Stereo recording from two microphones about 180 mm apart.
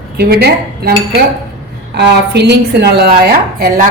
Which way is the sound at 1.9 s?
70° right (ahead or behind).